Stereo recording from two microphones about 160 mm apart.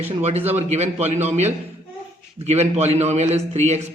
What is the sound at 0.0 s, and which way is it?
A man's voice, 40° right (ahead or behind).